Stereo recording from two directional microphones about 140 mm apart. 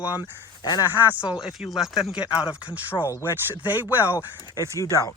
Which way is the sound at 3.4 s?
15° right (ahead or behind).